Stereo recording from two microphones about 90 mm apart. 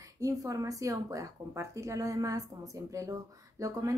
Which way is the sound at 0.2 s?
40° right (ahead or behind).